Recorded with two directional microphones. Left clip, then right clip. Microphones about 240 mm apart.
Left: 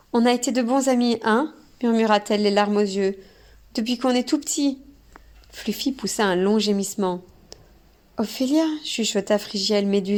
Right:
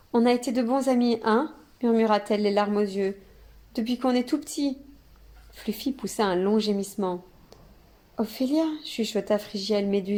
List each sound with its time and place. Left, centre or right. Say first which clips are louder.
0.1 s a woman's voice: left 3 dB; left